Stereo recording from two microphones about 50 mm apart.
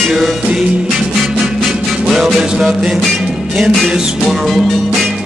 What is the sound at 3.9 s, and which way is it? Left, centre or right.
Music, centre.